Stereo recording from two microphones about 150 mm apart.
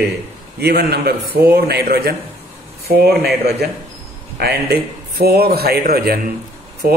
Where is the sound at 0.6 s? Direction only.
90° right.